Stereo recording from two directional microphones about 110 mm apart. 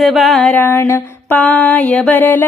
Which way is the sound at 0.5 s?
20° left (ahead or behind).